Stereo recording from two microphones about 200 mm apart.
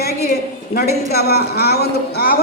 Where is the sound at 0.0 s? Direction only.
50° left (ahead or behind).